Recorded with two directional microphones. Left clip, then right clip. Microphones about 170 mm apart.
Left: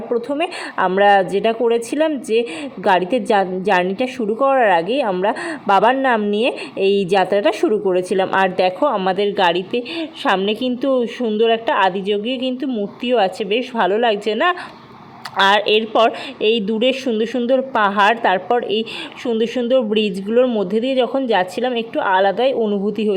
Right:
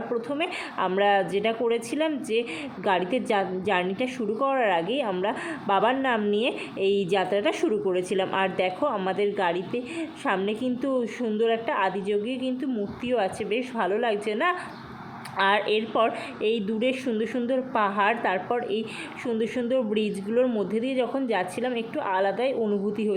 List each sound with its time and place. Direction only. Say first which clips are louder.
0.1 s a woman's voice: left 9 dB; 30° left (ahead or behind)